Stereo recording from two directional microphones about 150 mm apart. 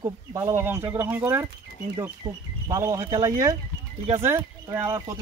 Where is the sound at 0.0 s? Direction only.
20° right (ahead or behind).